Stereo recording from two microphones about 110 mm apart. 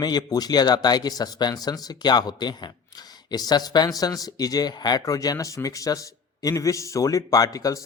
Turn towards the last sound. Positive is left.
turn(degrees=30)  # may be behind; listen again after turning